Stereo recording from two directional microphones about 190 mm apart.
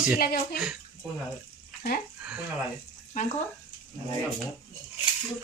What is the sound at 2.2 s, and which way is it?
Speech, 5° right (ahead or behind).